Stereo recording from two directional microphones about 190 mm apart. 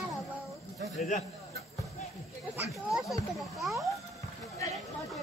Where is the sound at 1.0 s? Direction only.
40° left (ahead or behind).